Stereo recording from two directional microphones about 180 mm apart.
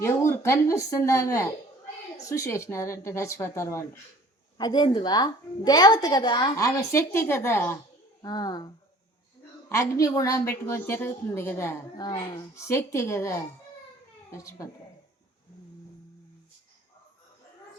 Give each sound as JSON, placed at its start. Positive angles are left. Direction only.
{"t": 0.0, "sound": "a woman's voice", "side_deg": 15}